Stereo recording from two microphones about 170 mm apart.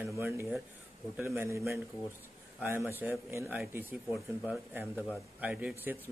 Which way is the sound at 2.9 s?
15° right (ahead or behind).